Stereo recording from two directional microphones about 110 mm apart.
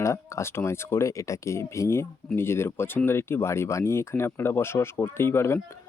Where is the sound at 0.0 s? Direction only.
25° left (ahead or behind).